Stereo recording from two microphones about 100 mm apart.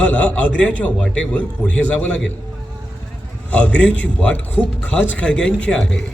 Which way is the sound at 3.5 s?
15° left (ahead or behind).